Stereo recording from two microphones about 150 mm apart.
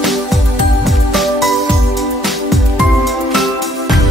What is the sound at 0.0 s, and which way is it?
Music, centre (ahead or behind).